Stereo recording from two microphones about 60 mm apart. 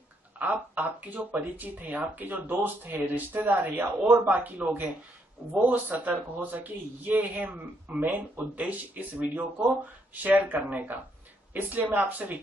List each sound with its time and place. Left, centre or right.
0.4 s speech: right